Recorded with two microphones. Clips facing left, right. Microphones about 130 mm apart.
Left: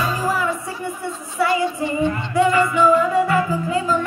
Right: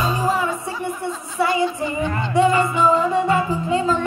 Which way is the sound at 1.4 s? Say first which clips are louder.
Even; 25° right (ahead or behind).